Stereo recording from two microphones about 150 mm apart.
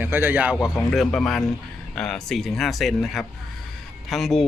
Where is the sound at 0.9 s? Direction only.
Centre (ahead or behind).